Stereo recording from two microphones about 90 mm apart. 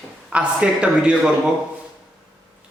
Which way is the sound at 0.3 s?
10° right (ahead or behind).